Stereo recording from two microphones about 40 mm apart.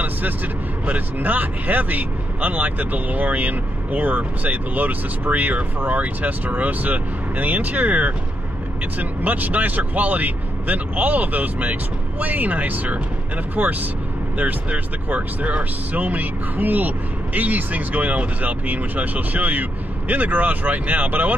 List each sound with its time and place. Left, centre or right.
0.8 s speech: right
15.0 s speech: right